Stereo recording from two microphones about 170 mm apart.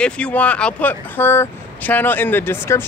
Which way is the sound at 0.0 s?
5° left (ahead or behind).